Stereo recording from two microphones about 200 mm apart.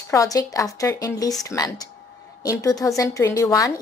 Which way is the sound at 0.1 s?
15° left (ahead or behind).